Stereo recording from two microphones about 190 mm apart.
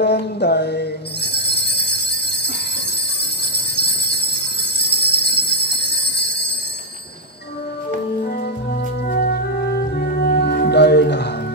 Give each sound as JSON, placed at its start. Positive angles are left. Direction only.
{"t": 0.0, "sound": "music", "side_deg": 60}
{"t": 3.5, "sound": "jingle bell", "side_deg": 60}
{"t": 9.0, "sound": "music", "side_deg": 55}